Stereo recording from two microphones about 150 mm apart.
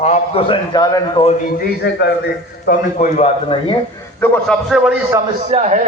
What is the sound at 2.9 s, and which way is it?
Speech, 55° left (ahead or behind).